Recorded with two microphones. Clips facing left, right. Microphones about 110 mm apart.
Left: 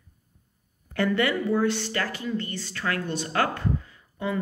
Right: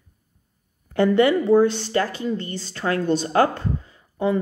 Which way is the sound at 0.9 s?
25° right (ahead or behind).